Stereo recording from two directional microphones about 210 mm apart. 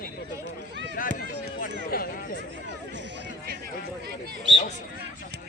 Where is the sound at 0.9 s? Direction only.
40° left (ahead or behind).